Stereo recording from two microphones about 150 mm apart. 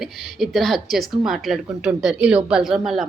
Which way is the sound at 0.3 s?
Centre (ahead or behind).